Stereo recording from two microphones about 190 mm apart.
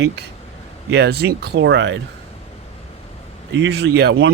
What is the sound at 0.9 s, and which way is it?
Speech, 60° right (ahead or behind).